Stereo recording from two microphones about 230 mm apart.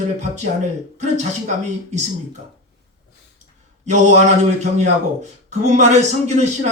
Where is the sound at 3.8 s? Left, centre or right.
Right.